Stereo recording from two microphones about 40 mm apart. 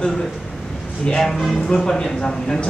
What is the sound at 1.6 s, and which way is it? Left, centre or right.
A man's voice, centre.